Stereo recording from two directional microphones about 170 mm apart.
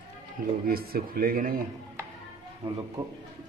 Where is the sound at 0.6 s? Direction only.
60° right (ahead or behind).